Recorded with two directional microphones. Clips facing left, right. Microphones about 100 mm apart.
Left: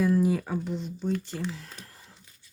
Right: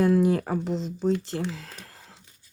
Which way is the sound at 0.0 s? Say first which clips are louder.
Right 3 dB; 75° right (ahead or behind).